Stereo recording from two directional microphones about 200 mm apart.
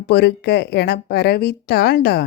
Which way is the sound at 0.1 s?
55° left (ahead or behind).